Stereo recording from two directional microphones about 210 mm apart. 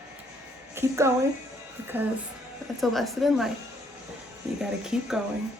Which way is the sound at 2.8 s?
Centre (ahead or behind).